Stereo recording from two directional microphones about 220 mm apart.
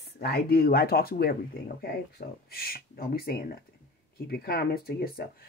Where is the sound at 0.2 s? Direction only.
45° left (ahead or behind).